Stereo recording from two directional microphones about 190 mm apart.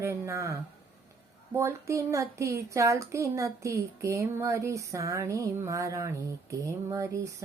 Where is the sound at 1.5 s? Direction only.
15° right (ahead or behind).